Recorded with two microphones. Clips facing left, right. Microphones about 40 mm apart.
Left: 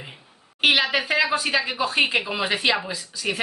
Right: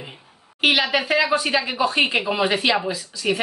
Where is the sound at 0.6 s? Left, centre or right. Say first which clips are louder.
Right 1 dB; centre.